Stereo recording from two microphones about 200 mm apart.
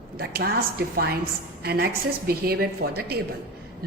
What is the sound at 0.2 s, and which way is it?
A woman's voice, 50° right (ahead or behind).